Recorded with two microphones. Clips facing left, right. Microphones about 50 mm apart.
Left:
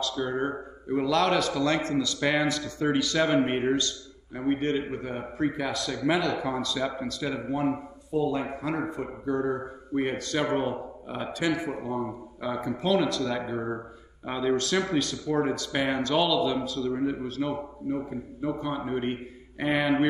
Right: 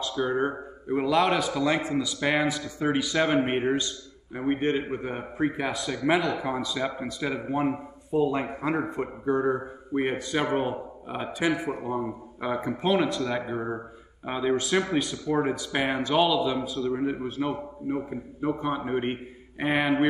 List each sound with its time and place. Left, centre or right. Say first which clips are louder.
0.2 s a man's voice: right 5 dB; right
13.6 s speech: even; centre
14.2 s a man's voice: even; centre